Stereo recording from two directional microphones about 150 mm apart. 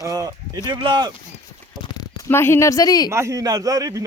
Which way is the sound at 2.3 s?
15° left (ahead or behind).